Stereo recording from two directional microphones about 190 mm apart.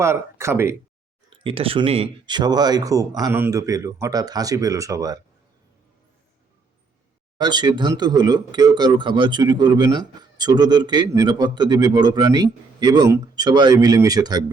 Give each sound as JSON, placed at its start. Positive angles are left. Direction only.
{"t": 0.0, "sound": "speech", "side_deg": -15}
{"t": 1.3, "sound": "speech", "side_deg": -30}
{"t": 7.3, "sound": "speech", "side_deg": -20}